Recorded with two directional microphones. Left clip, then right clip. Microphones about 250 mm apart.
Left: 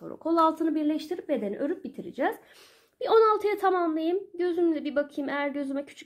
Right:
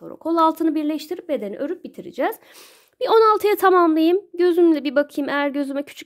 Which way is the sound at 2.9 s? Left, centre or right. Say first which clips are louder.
Right 6 dB; right.